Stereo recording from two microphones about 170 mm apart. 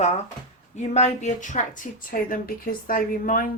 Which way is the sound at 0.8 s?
40° left (ahead or behind).